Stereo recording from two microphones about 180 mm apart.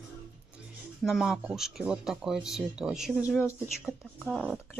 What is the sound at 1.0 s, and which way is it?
Speech, centre (ahead or behind).